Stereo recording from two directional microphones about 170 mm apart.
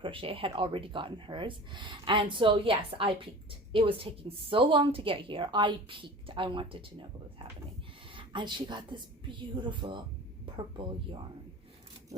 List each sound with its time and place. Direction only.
0.0 s speech: 30° right (ahead or behind)
8.1 s a woman's voice: 30° right (ahead or behind)